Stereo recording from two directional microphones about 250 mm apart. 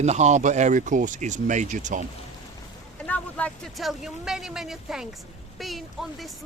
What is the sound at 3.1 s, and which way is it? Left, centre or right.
Speech, centre.